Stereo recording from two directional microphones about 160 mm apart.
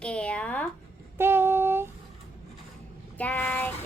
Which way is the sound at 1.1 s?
15° right (ahead or behind).